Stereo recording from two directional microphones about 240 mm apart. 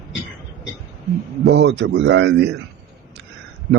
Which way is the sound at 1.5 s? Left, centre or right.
Right.